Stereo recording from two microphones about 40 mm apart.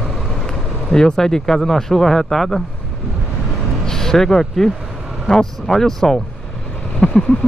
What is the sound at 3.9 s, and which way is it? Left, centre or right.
Speech, centre.